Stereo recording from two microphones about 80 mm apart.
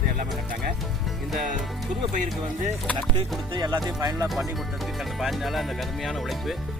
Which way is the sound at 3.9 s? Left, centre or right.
Right.